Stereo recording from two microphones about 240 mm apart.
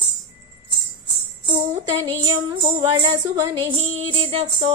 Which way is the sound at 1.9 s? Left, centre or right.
Centre.